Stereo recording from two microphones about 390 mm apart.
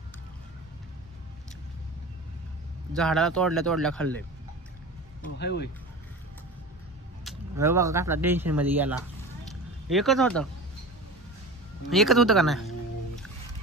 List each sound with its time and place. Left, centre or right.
2.9 s speech: centre
5.4 s speech: left
7.2 s speech: centre
11.9 s speech: centre